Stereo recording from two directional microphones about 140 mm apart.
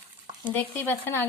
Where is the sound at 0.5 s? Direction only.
15° left (ahead or behind).